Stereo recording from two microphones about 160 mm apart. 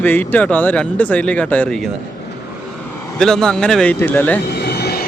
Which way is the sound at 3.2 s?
5° left (ahead or behind).